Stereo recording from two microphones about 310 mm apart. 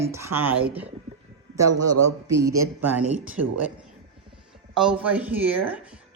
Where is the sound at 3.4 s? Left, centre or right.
Right.